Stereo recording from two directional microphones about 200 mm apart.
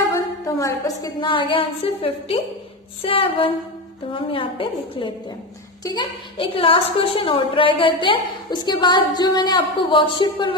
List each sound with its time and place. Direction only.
0.0 s a woman's voice: 15° left (ahead or behind)